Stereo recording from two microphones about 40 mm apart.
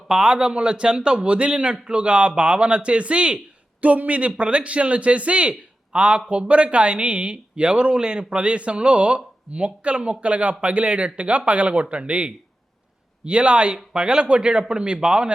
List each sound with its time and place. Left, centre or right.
0.1 s a man's voice: right
3.8 s a man's voice: right